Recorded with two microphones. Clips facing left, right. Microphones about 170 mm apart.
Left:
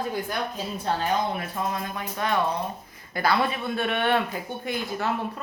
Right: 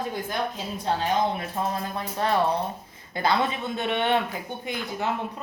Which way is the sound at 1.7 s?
30° right (ahead or behind).